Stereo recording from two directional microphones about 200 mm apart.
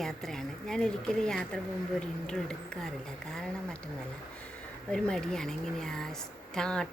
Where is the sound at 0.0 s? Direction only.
Centre (ahead or behind).